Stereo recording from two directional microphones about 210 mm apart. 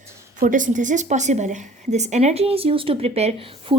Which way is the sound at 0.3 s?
40° right (ahead or behind).